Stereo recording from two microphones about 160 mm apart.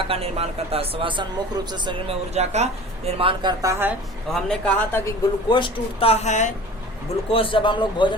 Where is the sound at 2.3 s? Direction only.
45° right (ahead or behind).